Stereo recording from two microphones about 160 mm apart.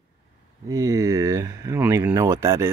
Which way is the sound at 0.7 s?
20° right (ahead or behind).